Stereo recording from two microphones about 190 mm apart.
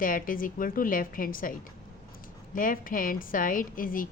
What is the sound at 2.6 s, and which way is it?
A woman's voice, 45° left (ahead or behind).